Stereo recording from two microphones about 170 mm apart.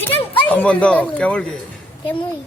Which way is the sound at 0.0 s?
10° left (ahead or behind).